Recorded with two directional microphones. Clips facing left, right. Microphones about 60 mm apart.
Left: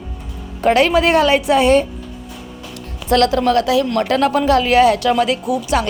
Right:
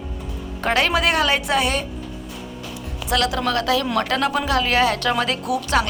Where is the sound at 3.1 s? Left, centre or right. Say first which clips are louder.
Left 7 dB; left.